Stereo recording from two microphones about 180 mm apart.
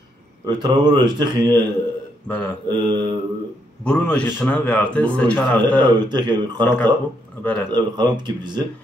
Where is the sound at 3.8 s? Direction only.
5° left (ahead or behind).